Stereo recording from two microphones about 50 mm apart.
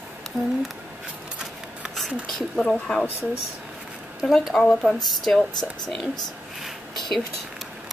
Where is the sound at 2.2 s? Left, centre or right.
Centre.